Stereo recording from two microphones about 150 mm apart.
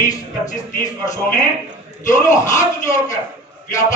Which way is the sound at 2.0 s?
20° left (ahead or behind).